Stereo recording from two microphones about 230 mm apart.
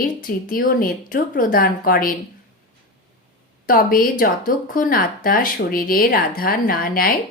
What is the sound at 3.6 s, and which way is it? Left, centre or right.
Speech, left.